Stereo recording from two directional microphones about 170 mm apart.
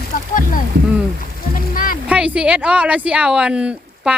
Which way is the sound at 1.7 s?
55° left (ahead or behind).